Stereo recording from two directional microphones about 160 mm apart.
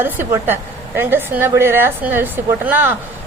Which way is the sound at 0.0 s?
15° right (ahead or behind).